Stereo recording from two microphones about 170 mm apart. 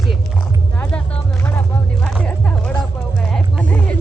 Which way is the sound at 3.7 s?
5° left (ahead or behind).